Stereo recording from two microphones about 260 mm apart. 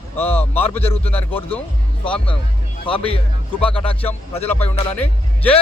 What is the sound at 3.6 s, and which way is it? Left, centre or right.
Speech, left.